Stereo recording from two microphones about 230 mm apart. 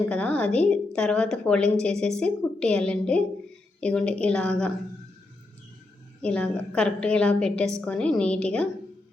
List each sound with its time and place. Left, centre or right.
0.0 s a woman's voice: centre
6.2 s a woman's voice: centre